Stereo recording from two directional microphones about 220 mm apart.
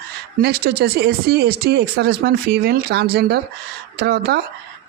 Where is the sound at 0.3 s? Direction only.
45° right (ahead or behind).